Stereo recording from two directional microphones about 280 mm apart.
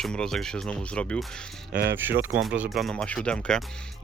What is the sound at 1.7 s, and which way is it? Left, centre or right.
Speech, right.